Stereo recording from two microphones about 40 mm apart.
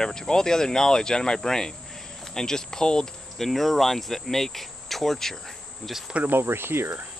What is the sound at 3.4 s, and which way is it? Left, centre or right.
Cricket, centre.